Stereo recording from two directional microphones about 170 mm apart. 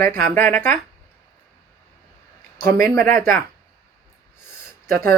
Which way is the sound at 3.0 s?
55° right (ahead or behind).